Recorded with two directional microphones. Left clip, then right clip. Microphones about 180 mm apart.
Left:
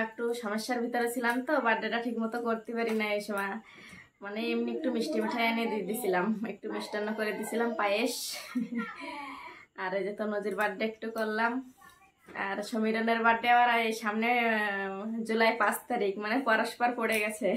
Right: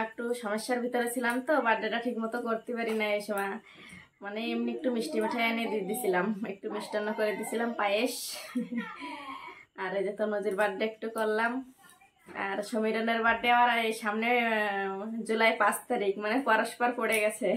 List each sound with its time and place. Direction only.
0.3 s speech: centre (ahead or behind)
9.8 s speech: centre (ahead or behind)